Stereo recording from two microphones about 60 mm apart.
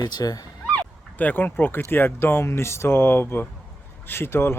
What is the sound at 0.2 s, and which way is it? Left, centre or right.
Speech, left.